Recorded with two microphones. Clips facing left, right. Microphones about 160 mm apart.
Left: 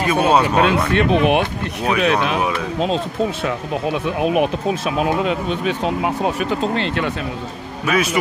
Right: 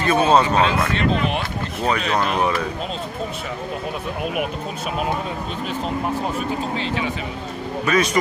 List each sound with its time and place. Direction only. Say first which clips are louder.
0.0 s speech: left 1 dB; 10° left (ahead or behind)
0.6 s speech: left 4 dB; 60° left (ahead or behind)
4.8 s speech: left 4 dB; 85° left; by 7.2 s 70° left (ahead or behind)
7.8 s speech: left 1 dB; 5° left (ahead or behind)